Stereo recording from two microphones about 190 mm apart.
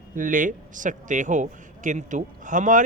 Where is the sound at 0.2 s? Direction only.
45° right (ahead or behind).